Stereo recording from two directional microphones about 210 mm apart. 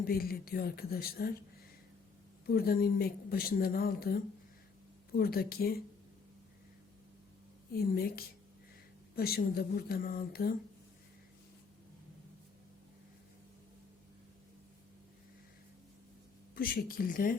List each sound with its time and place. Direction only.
0.0 s a woman's voice: 45° left (ahead or behind)
2.5 s a woman's voice: 45° left (ahead or behind)
7.8 s a woman's voice: 45° left (ahead or behind)
16.6 s a woman's voice: 45° left (ahead or behind)